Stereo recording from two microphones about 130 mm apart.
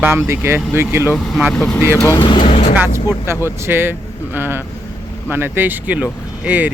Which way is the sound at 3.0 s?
20° right (ahead or behind).